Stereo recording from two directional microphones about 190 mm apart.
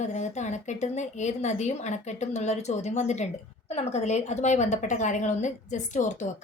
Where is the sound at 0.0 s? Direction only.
40° left (ahead or behind).